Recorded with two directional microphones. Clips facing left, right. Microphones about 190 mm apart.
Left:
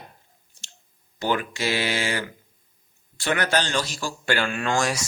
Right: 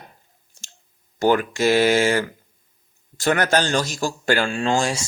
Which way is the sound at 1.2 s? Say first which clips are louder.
Right 7 dB; 45° right (ahead or behind).